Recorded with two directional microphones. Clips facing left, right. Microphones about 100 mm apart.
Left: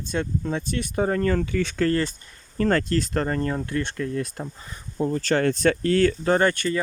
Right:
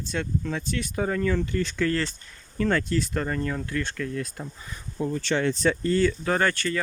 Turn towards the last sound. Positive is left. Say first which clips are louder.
# left 4 dB
turn(degrees=25)  # may be behind; listen again after turning